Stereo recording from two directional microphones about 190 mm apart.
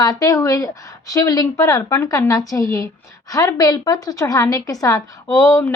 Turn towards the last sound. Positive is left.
turn(degrees=15)  # may be behind; listen again after turning